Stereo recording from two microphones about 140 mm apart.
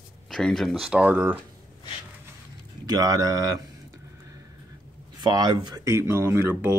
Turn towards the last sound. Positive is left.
turn(degrees=-15)  # may be behind; listen again after turning